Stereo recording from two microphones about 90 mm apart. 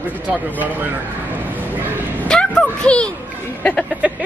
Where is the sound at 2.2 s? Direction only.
10° left (ahead or behind).